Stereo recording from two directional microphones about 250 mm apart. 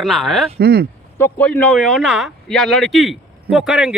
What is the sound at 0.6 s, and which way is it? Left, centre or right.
Speech, right.